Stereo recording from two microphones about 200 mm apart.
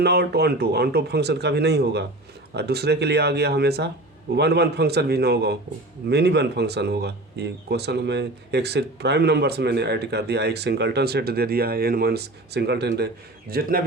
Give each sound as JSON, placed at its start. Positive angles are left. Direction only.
{"t": 0.0, "sound": "a man's voice", "side_deg": -55}